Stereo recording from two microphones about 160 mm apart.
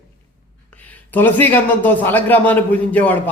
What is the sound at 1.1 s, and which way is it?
A man's voice, 10° left (ahead or behind).